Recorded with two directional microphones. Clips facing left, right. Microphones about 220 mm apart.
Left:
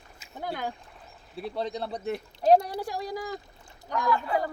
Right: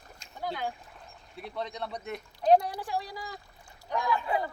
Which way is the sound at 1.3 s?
30° left (ahead or behind).